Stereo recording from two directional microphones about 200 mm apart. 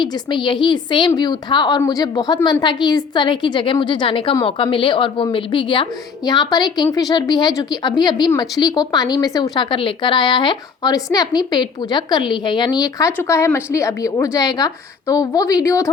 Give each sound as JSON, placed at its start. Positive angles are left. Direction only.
{"t": 0.0, "sound": "a woman's voice", "side_deg": 25}